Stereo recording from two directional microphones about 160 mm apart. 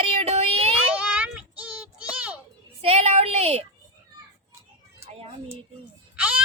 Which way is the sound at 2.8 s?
40° right (ahead or behind).